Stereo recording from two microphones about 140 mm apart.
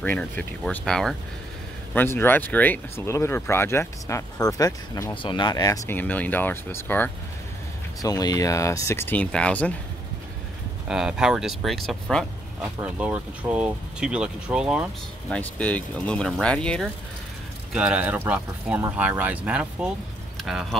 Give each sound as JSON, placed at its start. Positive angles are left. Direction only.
{"t": 0.0, "sound": "speech", "side_deg": 10}
{"t": 2.0, "sound": "speech", "side_deg": 15}
{"t": 5.1, "sound": "speech", "side_deg": 35}
{"t": 5.9, "sound": "speech", "side_deg": 10}
{"t": 8.0, "sound": "speech", "side_deg": 25}
{"t": 10.9, "sound": "speech", "side_deg": -5}
{"t": 13.0, "sound": "speech", "side_deg": -10}
{"t": 15.2, "sound": "speech", "side_deg": 10}
{"t": 17.7, "sound": "speech", "side_deg": -10}
{"t": 20.3, "sound": "a sound", "side_deg": -5}